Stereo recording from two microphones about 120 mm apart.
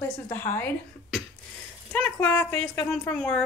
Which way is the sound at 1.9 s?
15° left (ahead or behind).